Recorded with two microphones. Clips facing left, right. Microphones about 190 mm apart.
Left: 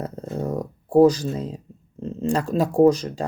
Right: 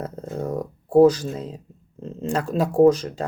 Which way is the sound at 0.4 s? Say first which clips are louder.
Even; 10° left (ahead or behind).